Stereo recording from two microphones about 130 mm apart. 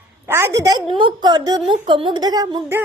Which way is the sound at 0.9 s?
35° right (ahead or behind).